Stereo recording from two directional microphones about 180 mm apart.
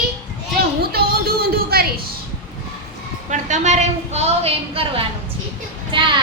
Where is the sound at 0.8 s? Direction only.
60° right (ahead or behind).